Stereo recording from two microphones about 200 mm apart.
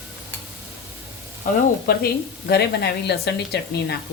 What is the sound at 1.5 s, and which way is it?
A woman's voice, 45° left (ahead or behind).